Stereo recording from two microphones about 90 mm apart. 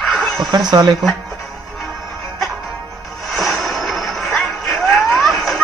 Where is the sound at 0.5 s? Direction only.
45° right (ahead or behind).